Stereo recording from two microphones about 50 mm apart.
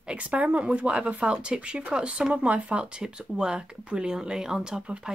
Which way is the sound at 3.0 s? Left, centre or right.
Centre.